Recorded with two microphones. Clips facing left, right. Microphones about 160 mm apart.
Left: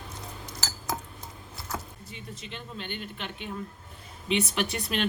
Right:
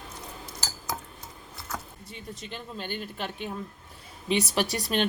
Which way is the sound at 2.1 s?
40° right (ahead or behind).